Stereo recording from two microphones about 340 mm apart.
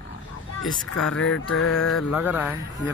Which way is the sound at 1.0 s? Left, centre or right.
Centre.